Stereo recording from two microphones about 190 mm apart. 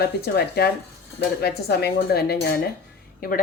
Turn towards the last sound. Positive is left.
turn(degrees=50)  # may be behind; listen again after turning